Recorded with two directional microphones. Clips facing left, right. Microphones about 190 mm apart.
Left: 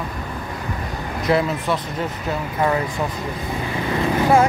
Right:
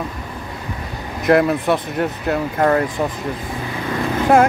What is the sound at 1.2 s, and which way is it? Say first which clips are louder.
Speech: right 5 dB; 60° right (ahead or behind).